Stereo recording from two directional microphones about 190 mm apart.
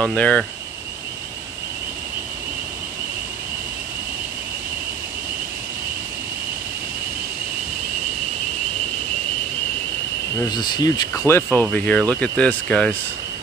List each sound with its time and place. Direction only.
0.0 s speech: 5° left (ahead or behind)
10.5 s speech: 20° left (ahead or behind); by 12.9 s 5° left (ahead or behind)